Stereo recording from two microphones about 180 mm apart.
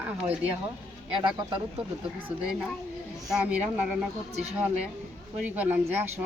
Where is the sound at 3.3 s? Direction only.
5° right (ahead or behind).